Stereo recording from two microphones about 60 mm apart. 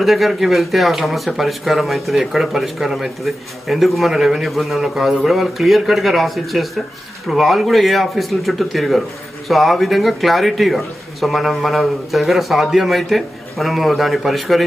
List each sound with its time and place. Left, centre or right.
0.0 s speech: centre